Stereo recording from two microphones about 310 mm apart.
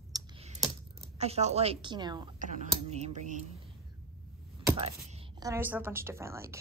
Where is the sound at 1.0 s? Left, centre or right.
Right.